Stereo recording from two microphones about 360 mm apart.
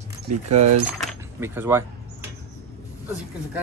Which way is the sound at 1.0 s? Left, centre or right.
Centre.